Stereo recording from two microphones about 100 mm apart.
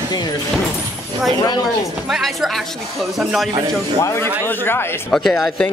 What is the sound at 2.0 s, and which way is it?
A man's voice, 5° right (ahead or behind).